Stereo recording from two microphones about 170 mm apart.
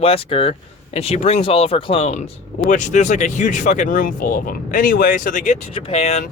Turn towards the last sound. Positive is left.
turn(degrees=40)  # may be behind; listen again after turning